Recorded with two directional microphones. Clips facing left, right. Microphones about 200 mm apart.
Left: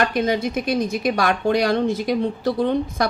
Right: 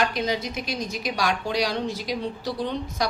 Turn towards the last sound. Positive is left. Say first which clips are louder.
# left 7 dB
turn(degrees=55)  # may be behind; listen again after turning